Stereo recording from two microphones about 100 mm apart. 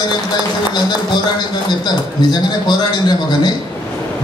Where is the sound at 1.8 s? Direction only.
45° left (ahead or behind).